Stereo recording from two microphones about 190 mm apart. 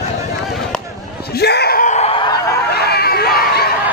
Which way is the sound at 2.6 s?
55° left (ahead or behind).